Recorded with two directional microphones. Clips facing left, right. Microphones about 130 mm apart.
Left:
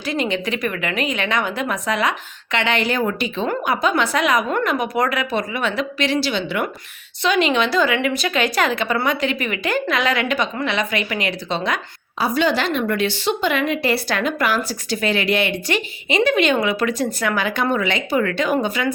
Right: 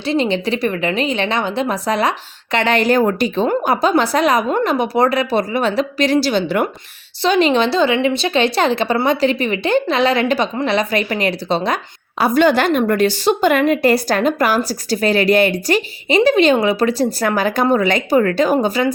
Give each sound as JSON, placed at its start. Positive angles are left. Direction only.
{"t": 0.0, "sound": "a woman's voice", "side_deg": -30}
{"t": 12.2, "sound": "a woman's voice", "side_deg": -50}